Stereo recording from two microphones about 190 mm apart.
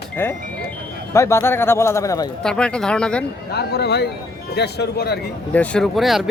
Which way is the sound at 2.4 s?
5° left (ahead or behind).